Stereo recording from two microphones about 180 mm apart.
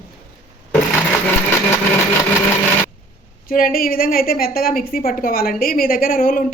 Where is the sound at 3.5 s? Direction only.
55° left (ahead or behind).